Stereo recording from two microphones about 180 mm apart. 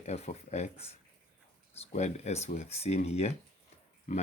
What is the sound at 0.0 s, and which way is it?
Speech, 40° left (ahead or behind).